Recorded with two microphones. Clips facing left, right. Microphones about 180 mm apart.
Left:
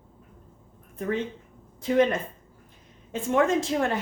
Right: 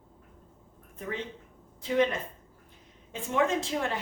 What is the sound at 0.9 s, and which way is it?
A woman's voice, 45° left (ahead or behind).